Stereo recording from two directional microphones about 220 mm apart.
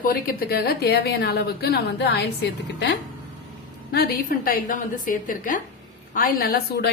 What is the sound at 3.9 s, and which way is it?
A woman's voice, 45° left (ahead or behind).